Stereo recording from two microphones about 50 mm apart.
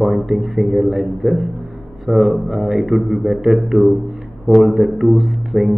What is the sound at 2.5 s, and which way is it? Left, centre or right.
Music, centre.